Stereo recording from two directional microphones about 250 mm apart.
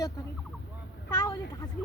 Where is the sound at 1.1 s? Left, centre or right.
Centre.